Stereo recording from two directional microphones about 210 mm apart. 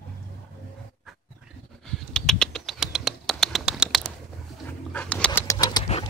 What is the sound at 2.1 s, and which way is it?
Bird, 5° left (ahead or behind).